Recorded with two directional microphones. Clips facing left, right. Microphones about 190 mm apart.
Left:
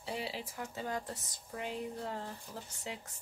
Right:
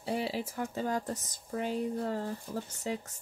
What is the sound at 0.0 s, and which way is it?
Speech, 45° right (ahead or behind).